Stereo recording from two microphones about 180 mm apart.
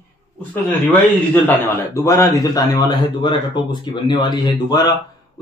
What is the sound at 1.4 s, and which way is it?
A man's voice, 15° left (ahead or behind).